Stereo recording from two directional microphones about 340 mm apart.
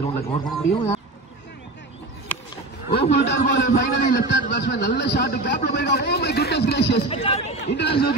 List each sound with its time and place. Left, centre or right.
0.4 s speech: centre
3.0 s a man's voice: left
7.1 s speech: centre
7.7 s a man's voice: left